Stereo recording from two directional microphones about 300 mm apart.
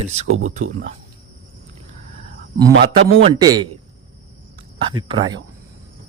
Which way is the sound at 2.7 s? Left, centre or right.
Right.